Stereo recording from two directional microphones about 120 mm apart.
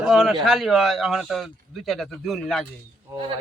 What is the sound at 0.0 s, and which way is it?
A man's voice, 5° right (ahead or behind).